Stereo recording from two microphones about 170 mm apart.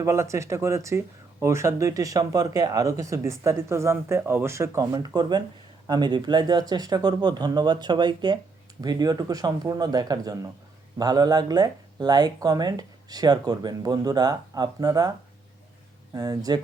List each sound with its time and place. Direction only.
0.0 s speech: 15° right (ahead or behind)
16.1 s speech: 20° right (ahead or behind)